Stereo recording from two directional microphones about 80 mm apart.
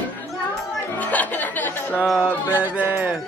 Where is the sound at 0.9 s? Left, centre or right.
Left.